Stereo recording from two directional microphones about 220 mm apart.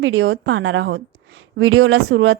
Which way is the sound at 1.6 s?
70° right (ahead or behind).